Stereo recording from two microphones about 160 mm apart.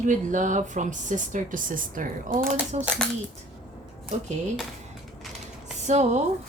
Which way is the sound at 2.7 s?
45° right (ahead or behind).